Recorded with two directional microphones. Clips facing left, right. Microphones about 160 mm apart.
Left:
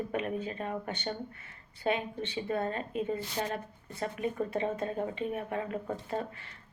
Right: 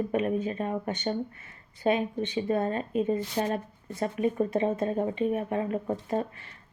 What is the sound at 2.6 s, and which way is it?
Speech, 25° right (ahead or behind).